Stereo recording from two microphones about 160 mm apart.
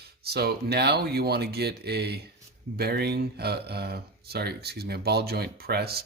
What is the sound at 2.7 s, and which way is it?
Speech, 80° right.